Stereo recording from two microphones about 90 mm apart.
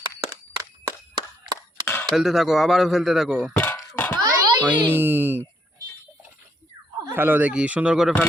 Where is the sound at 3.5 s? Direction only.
25° left (ahead or behind).